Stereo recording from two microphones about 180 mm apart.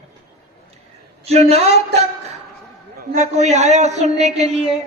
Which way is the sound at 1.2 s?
35° right (ahead or behind).